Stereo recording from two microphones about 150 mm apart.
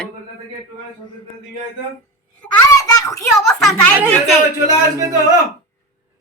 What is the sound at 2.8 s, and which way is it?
Speech, 25° left (ahead or behind).